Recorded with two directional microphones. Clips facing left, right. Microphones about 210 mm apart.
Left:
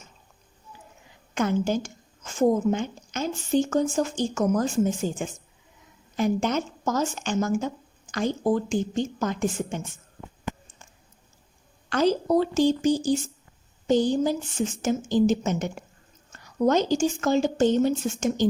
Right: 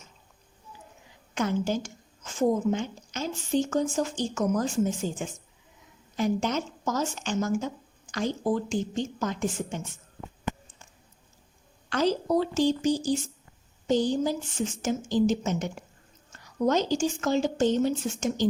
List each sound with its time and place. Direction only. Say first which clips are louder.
1.4 s a woman's voice: left 3 dB; 50° left (ahead or behind)
11.9 s a woman's voice: left 3 dB; 50° left (ahead or behind)